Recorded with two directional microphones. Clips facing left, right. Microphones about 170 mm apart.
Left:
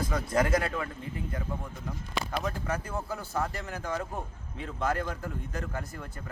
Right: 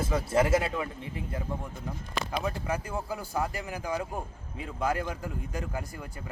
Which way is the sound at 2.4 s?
10° right (ahead or behind).